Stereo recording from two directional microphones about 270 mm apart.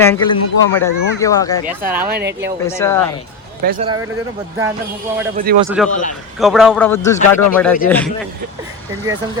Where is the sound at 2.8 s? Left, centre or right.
Centre.